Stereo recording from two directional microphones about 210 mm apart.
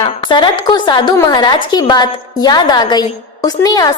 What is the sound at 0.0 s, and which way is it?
A woman's voice, 20° left (ahead or behind).